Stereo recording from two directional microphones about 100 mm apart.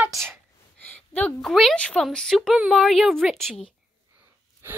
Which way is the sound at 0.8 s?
15° left (ahead or behind).